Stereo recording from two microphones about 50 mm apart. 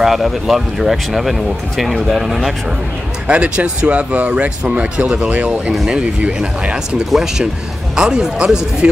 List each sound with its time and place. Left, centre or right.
0.0 s speech: centre
3.3 s speech: right
7.1 s speech: centre